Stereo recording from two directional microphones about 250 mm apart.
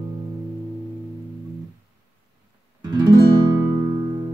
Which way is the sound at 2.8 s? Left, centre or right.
Centre.